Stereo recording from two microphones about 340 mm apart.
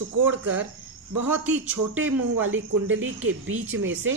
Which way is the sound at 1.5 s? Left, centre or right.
Centre.